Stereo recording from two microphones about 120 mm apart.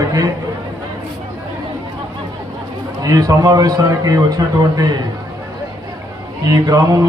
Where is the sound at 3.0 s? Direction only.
30° right (ahead or behind).